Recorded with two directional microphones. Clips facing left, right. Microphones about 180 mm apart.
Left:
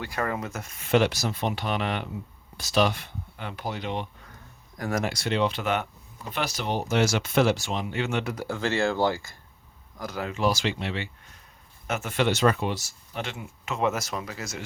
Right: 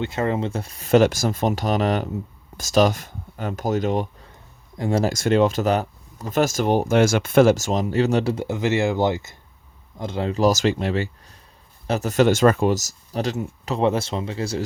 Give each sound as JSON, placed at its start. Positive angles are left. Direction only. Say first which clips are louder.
{"t": 0.0, "sound": "speech", "louder": "right 7 dB", "side_deg": -25}
{"t": 4.8, "sound": "speech", "louder": "right 6 dB", "side_deg": -25}
{"t": 5.0, "sound": "speech", "louder": "right 9 dB", "side_deg": -45}